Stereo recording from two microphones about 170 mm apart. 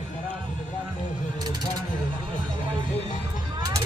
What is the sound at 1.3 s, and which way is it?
Speech, 25° right (ahead or behind).